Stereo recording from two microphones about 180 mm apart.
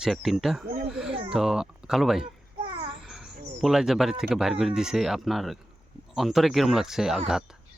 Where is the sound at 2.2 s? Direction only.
30° right (ahead or behind).